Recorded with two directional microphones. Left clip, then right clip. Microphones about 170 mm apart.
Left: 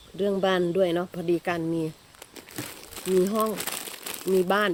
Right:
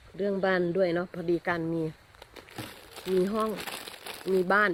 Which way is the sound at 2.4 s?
Centre (ahead or behind).